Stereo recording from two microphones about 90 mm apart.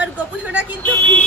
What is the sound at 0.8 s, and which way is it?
Speech, 20° left (ahead or behind).